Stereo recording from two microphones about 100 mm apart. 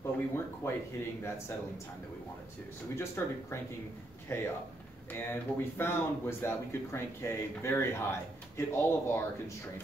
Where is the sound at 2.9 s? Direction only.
25° left (ahead or behind).